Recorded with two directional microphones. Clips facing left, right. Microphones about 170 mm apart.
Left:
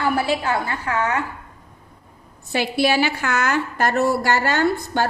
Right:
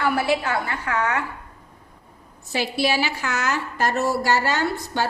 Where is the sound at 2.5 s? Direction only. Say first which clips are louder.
Left 3 dB; 55° left (ahead or behind).